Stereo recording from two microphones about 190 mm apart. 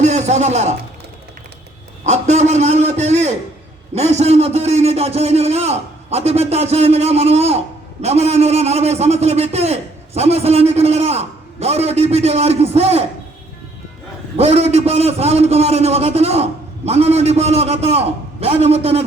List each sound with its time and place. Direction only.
0.0 s a man's voice: 35° right (ahead or behind)
2.0 s a man's voice: 35° right (ahead or behind)
14.3 s a man's voice: 35° right (ahead or behind)